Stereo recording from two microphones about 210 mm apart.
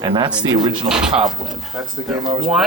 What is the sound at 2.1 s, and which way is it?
Speech, 20° right (ahead or behind).